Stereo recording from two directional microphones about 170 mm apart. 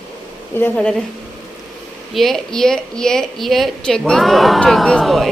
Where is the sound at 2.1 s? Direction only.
Centre (ahead or behind).